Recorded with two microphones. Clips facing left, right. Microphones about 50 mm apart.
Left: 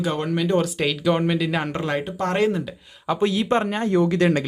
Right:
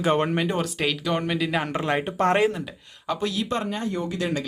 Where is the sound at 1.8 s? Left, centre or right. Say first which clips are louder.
Even; right.